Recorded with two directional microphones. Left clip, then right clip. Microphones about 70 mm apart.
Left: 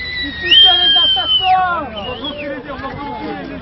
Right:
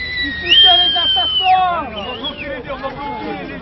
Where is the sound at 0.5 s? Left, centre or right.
Left.